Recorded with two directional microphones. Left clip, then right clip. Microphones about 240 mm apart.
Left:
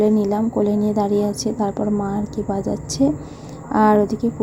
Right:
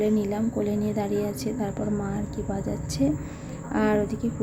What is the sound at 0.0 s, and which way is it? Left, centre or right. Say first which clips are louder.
A woman's voice: left 7 dB; centre.